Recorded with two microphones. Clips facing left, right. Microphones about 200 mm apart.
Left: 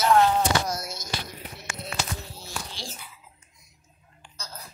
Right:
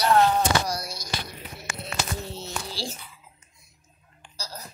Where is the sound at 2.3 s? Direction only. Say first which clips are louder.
Right 4 dB; 25° right (ahead or behind).